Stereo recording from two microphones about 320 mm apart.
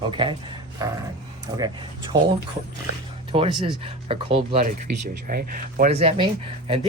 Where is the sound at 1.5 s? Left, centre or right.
Centre.